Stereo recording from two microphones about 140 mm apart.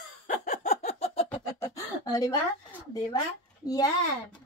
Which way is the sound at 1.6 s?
25° left (ahead or behind).